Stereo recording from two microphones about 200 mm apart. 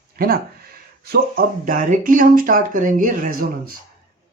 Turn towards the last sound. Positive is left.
turn(degrees=-45)  # may be behind; listen again after turning